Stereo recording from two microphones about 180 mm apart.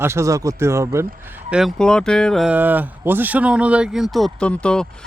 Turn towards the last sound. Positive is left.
turn(degrees=5)  # may be behind; listen again after turning